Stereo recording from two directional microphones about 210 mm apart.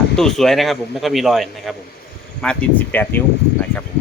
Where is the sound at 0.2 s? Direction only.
Centre (ahead or behind).